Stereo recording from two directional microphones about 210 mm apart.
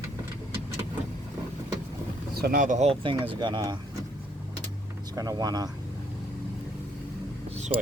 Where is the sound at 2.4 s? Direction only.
40° right (ahead or behind); by 3.8 s 20° right (ahead or behind).